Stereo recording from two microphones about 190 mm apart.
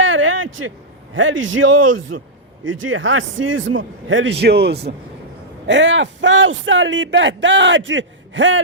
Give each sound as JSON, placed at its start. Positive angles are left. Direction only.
{"t": 0.0, "sound": "a sound", "side_deg": -90}
{"t": 1.1, "sound": "a man's voice", "side_deg": -85}
{"t": 5.6, "sound": "speech", "side_deg": -70}